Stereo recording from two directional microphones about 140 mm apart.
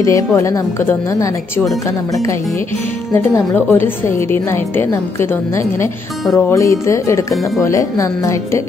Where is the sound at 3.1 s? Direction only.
15° left (ahead or behind).